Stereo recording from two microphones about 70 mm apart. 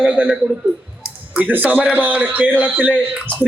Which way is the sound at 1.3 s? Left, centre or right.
Right.